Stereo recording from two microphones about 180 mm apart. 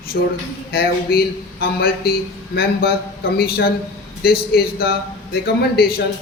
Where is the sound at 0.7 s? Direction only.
60° left (ahead or behind).